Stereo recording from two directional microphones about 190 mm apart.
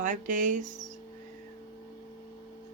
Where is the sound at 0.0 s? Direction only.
40° right (ahead or behind).